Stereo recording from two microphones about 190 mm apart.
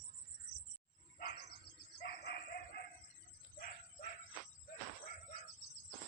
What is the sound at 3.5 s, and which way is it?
Dog, 45° left (ahead or behind).